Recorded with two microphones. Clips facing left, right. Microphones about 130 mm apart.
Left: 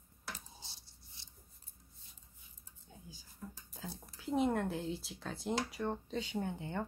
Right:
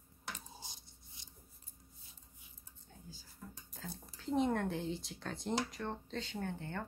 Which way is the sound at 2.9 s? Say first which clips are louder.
Left 2 dB; 10° left (ahead or behind).